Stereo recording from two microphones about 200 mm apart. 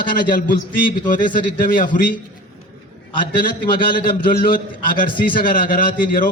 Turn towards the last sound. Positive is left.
turn(degrees=45)  # may be behind; listen again after turning